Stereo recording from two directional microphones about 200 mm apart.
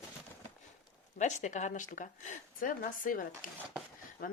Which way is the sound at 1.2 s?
35° left (ahead or behind).